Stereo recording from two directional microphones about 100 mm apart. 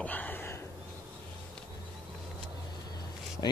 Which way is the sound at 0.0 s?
15° left (ahead or behind).